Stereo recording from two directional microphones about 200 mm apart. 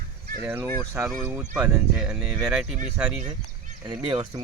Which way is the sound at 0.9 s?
5° right (ahead or behind).